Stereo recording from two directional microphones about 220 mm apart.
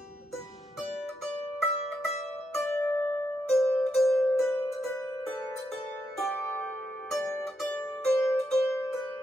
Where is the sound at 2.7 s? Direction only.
15° left (ahead or behind).